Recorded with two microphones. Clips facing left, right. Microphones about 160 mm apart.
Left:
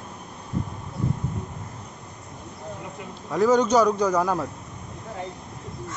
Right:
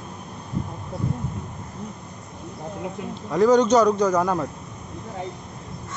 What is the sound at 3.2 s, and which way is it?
A man's voice, 5° left (ahead or behind).